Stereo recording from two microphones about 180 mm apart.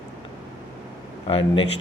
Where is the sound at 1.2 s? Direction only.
30° left (ahead or behind).